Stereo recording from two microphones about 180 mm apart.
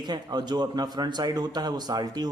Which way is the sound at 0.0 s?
25° right (ahead or behind).